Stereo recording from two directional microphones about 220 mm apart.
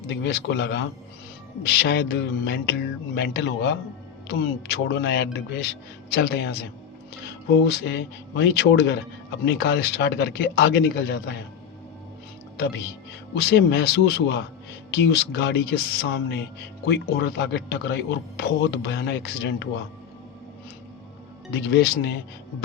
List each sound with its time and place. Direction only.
0.1 s speech: 50° left (ahead or behind)
13.3 s speech: 45° left (ahead or behind)
21.5 s speech: 45° left (ahead or behind)